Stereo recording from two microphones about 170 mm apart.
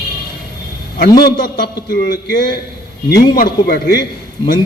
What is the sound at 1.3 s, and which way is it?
A man's voice, 55° left (ahead or behind).